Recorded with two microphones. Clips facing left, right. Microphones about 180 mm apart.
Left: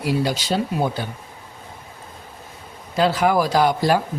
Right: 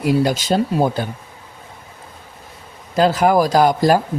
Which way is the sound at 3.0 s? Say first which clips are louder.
Right 4 dB; 45° right (ahead or behind).